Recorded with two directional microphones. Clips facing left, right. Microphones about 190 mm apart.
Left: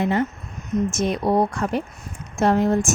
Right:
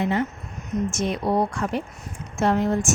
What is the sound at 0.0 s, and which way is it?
A woman's voice, 45° left (ahead or behind).